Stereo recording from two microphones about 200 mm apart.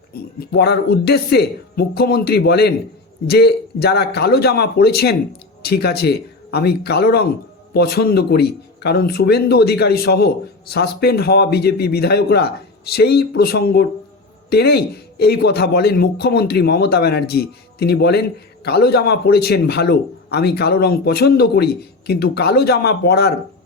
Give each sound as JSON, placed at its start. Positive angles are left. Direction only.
{"t": 0.1, "sound": "speech", "side_deg": 50}